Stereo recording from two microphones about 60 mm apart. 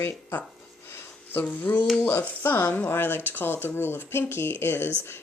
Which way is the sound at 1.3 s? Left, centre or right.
Left.